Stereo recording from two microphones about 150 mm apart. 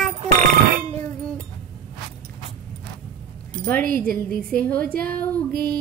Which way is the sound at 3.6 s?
5° left (ahead or behind).